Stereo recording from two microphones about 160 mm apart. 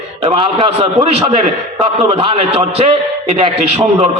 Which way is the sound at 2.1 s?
35° right (ahead or behind).